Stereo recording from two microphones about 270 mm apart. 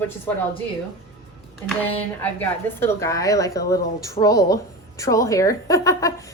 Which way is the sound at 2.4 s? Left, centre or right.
Centre.